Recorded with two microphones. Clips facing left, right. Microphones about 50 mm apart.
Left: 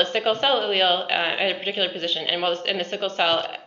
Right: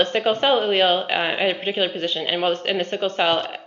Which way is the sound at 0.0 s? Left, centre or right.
Centre.